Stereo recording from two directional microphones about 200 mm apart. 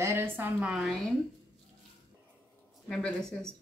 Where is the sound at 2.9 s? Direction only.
5° left (ahead or behind).